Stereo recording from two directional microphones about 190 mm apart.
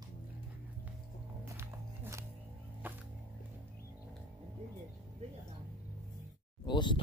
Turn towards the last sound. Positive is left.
turn(degrees=25)  # may be behind; listen again after turning